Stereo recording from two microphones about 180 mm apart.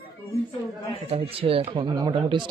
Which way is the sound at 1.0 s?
30° right (ahead or behind).